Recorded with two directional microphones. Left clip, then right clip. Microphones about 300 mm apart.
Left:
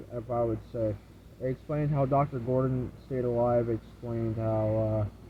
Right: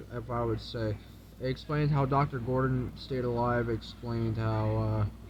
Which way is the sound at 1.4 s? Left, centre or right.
Centre.